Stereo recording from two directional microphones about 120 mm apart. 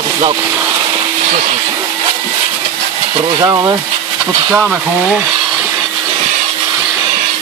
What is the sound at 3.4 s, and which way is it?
Speech, 30° right (ahead or behind).